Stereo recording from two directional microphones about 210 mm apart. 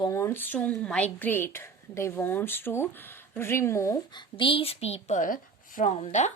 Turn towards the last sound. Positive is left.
turn(degrees=30)  # may be behind; listen again after turning